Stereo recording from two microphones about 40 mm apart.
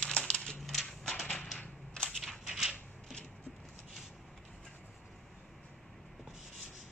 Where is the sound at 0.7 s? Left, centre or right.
Centre.